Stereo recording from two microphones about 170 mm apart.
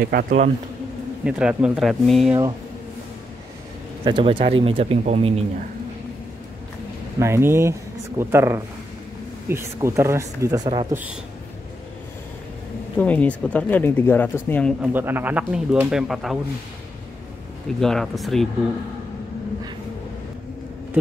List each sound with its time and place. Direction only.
0.0 s speech: 65° right (ahead or behind)
1.2 s speech: 5° right (ahead or behind)
4.0 s speech: 30° right (ahead or behind)
7.2 s speech: 15° right (ahead or behind)
12.9 s speech: 10° left (ahead or behind)
14.8 s speech: 10° right (ahead or behind)
17.7 s speech: centre (ahead or behind)